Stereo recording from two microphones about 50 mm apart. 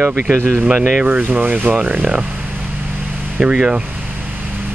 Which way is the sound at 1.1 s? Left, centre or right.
Right.